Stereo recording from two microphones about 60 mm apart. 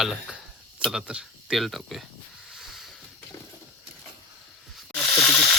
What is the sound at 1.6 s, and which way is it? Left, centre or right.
Speech, centre.